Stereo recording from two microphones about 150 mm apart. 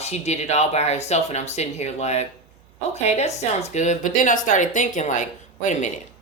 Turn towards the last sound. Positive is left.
turn(degrees=55)  # may be behind; listen again after turning